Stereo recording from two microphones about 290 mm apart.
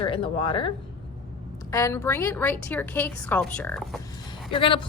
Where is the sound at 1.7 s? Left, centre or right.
Centre.